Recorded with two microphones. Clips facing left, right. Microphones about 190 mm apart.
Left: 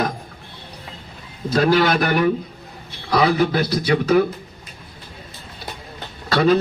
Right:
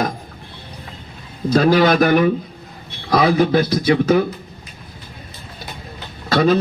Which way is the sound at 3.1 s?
45° right (ahead or behind).